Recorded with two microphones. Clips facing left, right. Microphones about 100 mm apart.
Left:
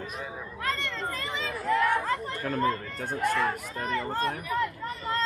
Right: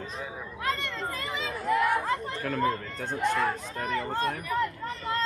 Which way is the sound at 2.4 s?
40° left (ahead or behind).